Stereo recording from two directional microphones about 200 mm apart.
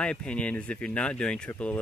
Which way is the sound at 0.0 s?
5° left (ahead or behind).